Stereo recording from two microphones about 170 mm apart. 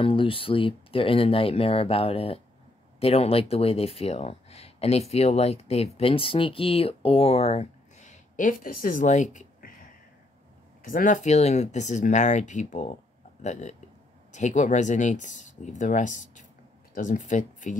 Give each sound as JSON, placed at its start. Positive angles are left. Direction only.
{"t": 0.0, "sound": "speech", "side_deg": 30}
{"t": 8.4, "sound": "speech", "side_deg": 55}
{"t": 10.8, "sound": "speech", "side_deg": 55}